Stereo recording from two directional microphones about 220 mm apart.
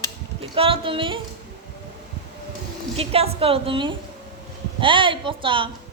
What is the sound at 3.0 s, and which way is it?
Music, 25° right (ahead or behind).